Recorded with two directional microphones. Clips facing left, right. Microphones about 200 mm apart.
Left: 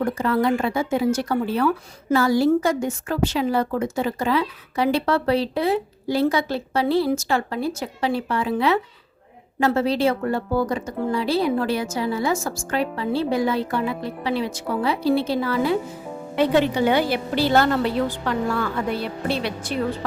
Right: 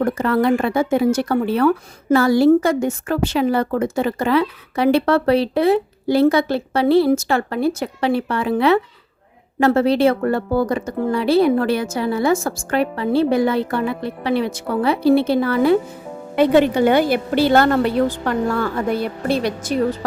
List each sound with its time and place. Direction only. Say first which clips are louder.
0.0 s a woman's voice: right 3 dB; 60° right (ahead or behind); by 20.1 s 45° right (ahead or behind)